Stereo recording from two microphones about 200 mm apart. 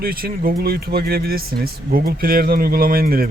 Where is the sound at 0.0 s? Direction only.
50° right (ahead or behind).